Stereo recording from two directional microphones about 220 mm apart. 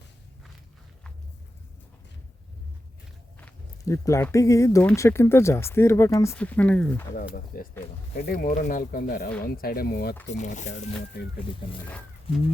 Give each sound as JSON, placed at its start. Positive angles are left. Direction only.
{"t": 3.3, "sound": "speech", "side_deg": 10}
{"t": 7.3, "sound": "speech", "side_deg": 40}
{"t": 10.3, "sound": "speech", "side_deg": 35}